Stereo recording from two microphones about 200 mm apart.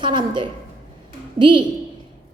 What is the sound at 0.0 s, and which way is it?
A woman's voice, 25° right (ahead or behind).